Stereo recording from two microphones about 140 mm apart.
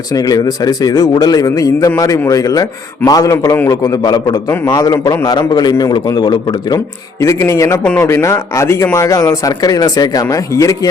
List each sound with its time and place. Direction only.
0.1 s a man's voice: 25° left (ahead or behind)